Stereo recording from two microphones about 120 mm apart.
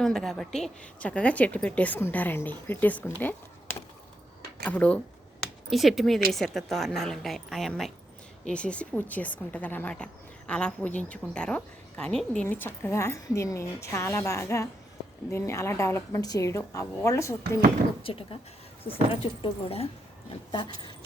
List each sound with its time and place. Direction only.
0.0 s a woman's voice: 5° left (ahead or behind)
5.4 s a woman's voice: centre (ahead or behind)
12.5 s a woman's voice: 20° left (ahead or behind)
18.0 s speech: 50° left (ahead or behind)